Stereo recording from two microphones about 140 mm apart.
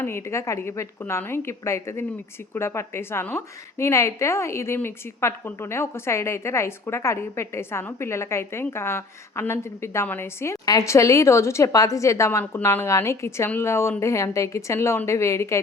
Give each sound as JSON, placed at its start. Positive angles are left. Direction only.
{"t": 0.0, "sound": "a woman's voice", "side_deg": 20}